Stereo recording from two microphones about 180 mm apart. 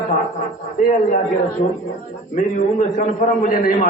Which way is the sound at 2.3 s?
45° left (ahead or behind).